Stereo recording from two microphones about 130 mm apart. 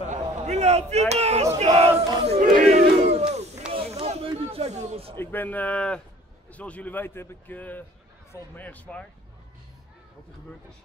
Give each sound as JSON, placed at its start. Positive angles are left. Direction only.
{"t": 0.1, "sound": "speech", "side_deg": -60}
{"t": 1.6, "sound": "battle cry", "side_deg": -55}
{"t": 3.7, "sound": "a sound", "side_deg": -55}
{"t": 5.1, "sound": "speech", "side_deg": 15}